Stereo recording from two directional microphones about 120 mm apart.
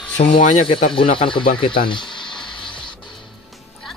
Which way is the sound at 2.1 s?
40° left (ahead or behind).